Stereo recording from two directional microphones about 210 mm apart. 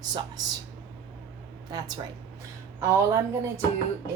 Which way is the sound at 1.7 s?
20° right (ahead or behind).